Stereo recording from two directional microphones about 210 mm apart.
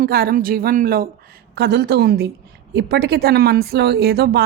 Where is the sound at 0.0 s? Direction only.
45° right (ahead or behind).